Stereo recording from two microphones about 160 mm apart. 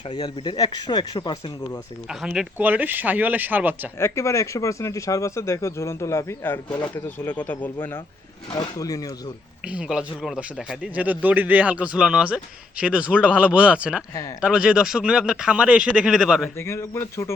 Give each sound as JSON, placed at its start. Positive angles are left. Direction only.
{"t": 0.1, "sound": "speech", "side_deg": 30}
{"t": 2.0, "sound": "a man's voice", "side_deg": -5}
{"t": 3.9, "sound": "speech", "side_deg": 15}
{"t": 6.7, "sound": "speech", "side_deg": 25}
{"t": 6.9, "sound": "speech", "side_deg": 10}
{"t": 9.6, "sound": "a man's voice", "side_deg": -5}
{"t": 14.1, "sound": "speech", "side_deg": 20}
{"t": 14.4, "sound": "speech", "side_deg": -5}
{"t": 16.6, "sound": "speech", "side_deg": 15}